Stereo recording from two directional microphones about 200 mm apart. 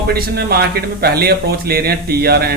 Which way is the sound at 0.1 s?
50° right (ahead or behind).